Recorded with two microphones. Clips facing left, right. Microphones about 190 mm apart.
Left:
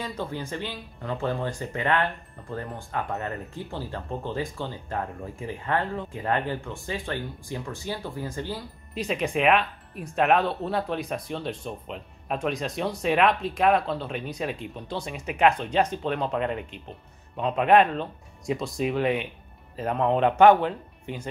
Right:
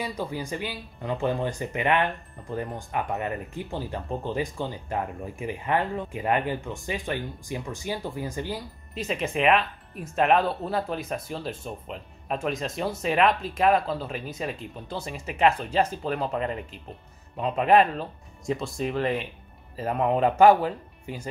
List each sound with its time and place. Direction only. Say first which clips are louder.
0.0 s speech: right 1 dB; 10° right (ahead or behind)
8.9 s speech: left 2 dB; centre (ahead or behind)